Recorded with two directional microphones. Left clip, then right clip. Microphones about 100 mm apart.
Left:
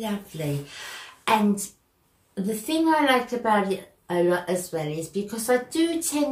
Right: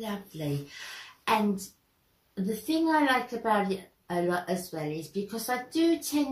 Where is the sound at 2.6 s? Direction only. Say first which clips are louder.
Left 4 dB; 15° left (ahead or behind).